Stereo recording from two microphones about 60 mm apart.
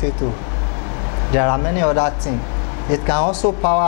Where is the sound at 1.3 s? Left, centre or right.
Left.